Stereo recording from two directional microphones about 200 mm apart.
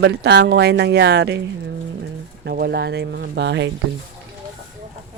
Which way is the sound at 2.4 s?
55° right (ahead or behind).